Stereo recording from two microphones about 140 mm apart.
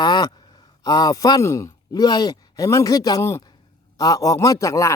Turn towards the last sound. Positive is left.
turn(degrees=25)  # may be behind; listen again after turning